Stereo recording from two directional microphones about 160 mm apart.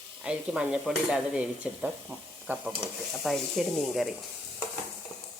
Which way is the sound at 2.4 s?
5° right (ahead or behind).